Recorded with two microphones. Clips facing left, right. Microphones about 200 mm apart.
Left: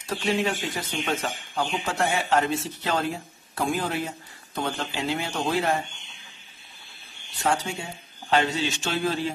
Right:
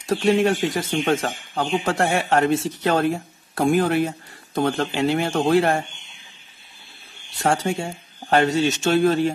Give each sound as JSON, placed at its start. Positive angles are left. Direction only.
{"t": 0.0, "sound": "speech", "side_deg": -50}
{"t": 7.4, "sound": "speech", "side_deg": -45}